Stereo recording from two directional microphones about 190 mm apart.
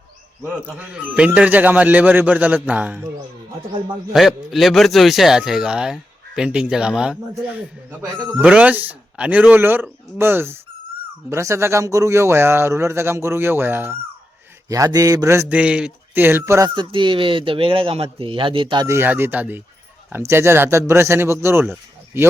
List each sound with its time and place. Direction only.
0.8 s speech: 5° right (ahead or behind)
4.1 s a man's voice: centre (ahead or behind)